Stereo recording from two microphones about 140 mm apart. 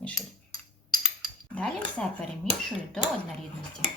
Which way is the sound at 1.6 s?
5° left (ahead or behind).